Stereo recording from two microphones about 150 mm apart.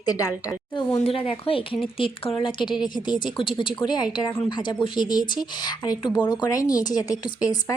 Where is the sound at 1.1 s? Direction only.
40° left (ahead or behind).